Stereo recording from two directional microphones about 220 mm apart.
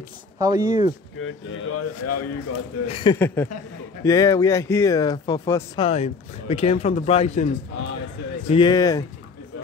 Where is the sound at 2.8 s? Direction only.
25° left (ahead or behind).